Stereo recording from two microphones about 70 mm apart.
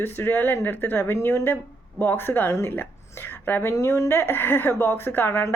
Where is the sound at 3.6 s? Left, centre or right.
Left.